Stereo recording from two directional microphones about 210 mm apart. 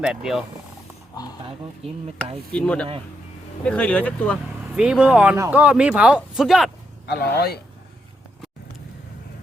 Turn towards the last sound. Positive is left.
turn(degrees=50)  # may be behind; listen again after turning